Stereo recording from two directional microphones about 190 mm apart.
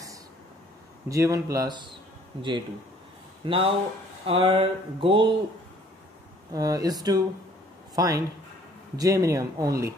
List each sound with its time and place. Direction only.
1.0 s speech: 15° right (ahead or behind)
3.4 s speech: 25° right (ahead or behind)
6.5 s speech: 20° right (ahead or behind)